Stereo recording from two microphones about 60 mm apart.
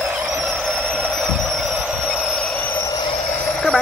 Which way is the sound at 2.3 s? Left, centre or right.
Centre.